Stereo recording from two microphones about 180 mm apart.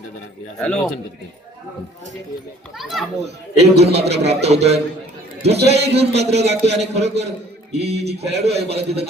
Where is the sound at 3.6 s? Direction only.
35° right (ahead or behind).